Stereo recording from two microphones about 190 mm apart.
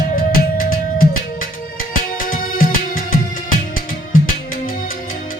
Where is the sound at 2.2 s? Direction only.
45° left (ahead or behind).